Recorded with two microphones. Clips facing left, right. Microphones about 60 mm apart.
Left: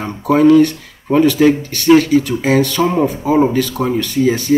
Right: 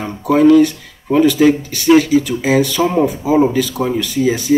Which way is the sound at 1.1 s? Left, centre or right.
Left.